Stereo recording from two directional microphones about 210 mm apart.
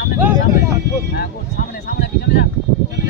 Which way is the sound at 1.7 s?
45° left (ahead or behind).